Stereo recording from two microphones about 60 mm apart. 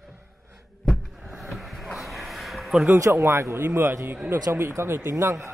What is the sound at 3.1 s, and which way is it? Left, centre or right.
Speech, right.